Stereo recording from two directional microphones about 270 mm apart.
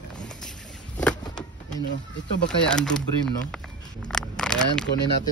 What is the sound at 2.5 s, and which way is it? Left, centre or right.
Speech, centre.